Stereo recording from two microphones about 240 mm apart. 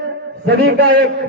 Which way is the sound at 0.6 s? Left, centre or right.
Right.